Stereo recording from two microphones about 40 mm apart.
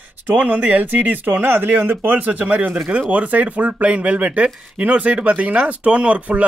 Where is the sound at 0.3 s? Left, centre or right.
Right.